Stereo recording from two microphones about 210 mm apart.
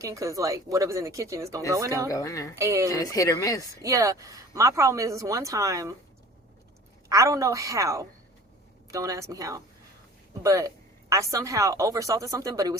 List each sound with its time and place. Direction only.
0.0 s speech: 15° right (ahead or behind)
2.0 s speech: 15° left (ahead or behind)
2.6 s speech: 15° right (ahead or behind)
2.9 s speech: 15° left (ahead or behind)
3.8 s speech: 15° right (ahead or behind)
7.1 s speech: 15° right (ahead or behind)